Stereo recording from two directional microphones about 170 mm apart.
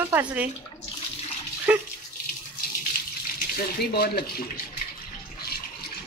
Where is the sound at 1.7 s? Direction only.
10° right (ahead or behind).